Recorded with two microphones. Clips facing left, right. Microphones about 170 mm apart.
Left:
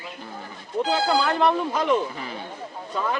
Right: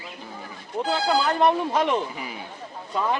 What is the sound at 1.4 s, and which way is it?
Speech, 20° right (ahead or behind).